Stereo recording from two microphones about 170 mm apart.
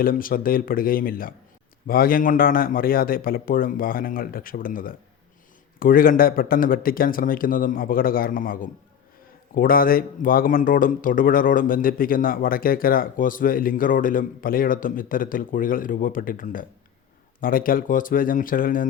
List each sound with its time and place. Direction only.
0.0 s speech: 55° left (ahead or behind)